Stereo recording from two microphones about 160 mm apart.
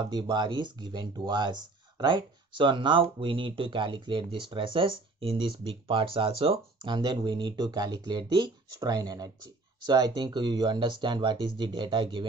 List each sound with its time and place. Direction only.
0.0 s speech: 25° right (ahead or behind)